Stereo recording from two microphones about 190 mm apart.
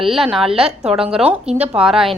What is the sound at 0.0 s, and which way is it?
A woman's voice, centre (ahead or behind).